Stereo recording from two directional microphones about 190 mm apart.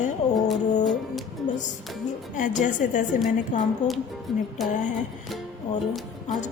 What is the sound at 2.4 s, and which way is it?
A woman's voice, 40° left (ahead or behind).